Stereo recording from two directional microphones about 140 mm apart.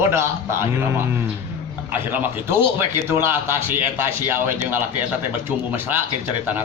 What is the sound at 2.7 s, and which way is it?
A man's voice, 15° right (ahead or behind).